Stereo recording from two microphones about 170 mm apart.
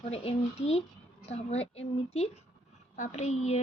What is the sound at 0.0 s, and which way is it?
A woman's voice, 35° left (ahead or behind).